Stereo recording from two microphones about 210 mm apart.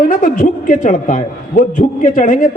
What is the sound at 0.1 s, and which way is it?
A man's voice, 40° left (ahead or behind).